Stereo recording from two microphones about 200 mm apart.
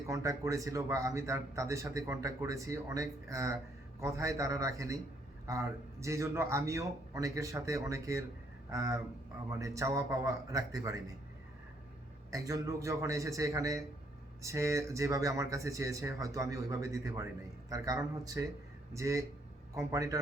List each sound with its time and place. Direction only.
0.1 s a man's voice: 15° right (ahead or behind)
12.3 s a man's voice: 15° right (ahead or behind)